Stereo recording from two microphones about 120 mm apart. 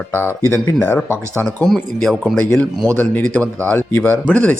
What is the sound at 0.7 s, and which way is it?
A man's voice, 5° left (ahead or behind).